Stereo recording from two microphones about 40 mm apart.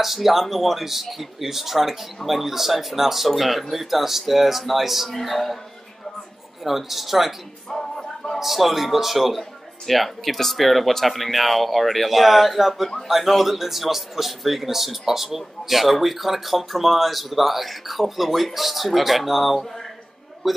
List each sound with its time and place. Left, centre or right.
0.0 s speech: centre
6.6 s speech: centre
7.7 s music: centre
8.4 s a woman's voice: centre